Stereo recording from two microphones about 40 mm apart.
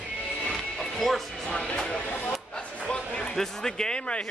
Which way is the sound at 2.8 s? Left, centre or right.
Left.